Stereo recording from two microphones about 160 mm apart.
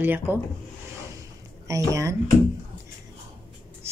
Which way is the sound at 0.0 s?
10° right (ahead or behind).